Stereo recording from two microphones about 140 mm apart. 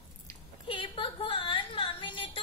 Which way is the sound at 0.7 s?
35° left (ahead or behind).